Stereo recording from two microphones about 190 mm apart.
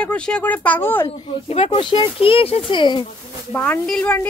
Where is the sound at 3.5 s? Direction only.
10° left (ahead or behind).